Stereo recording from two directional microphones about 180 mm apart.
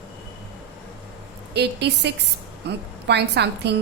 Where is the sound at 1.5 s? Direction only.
70° right (ahead or behind).